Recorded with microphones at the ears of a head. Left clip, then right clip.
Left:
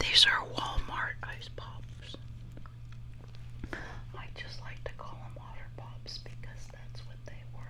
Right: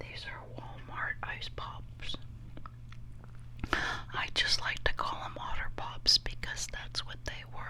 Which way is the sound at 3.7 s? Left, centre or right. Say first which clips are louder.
Right 11 dB; right.